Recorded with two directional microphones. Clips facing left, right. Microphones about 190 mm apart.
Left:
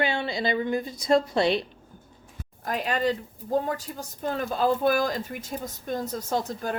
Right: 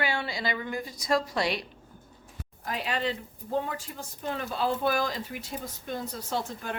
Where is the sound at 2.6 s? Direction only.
50° left (ahead or behind).